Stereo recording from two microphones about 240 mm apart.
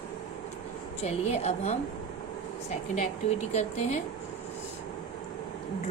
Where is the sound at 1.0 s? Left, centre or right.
Left.